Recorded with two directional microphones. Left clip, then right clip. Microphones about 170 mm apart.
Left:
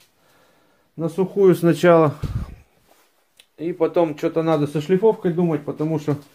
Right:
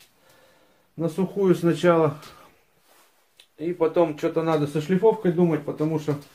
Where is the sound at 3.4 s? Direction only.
55° left (ahead or behind).